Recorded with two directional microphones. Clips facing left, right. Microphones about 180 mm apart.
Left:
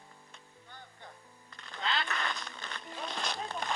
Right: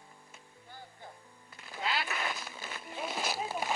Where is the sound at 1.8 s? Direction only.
5° right (ahead or behind).